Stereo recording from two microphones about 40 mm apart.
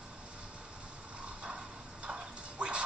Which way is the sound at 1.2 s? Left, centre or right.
Right.